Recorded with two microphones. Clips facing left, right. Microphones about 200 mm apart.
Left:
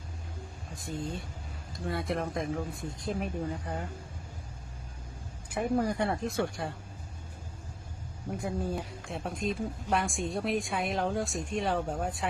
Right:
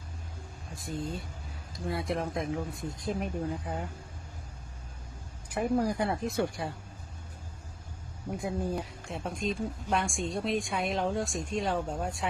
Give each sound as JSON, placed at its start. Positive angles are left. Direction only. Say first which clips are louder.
{"t": 0.9, "sound": "speech", "louder": "right 1 dB", "side_deg": 0}
{"t": 5.5, "sound": "speech", "louder": "right 1 dB", "side_deg": 0}
{"t": 8.3, "sound": "speech", "louder": "right 1 dB", "side_deg": 0}